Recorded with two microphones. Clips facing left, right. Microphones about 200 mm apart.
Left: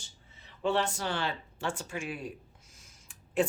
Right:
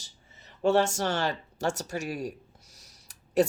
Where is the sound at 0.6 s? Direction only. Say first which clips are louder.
Right 6 dB; 45° right (ahead or behind).